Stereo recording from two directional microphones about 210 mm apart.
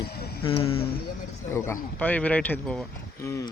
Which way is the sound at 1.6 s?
10° left (ahead or behind).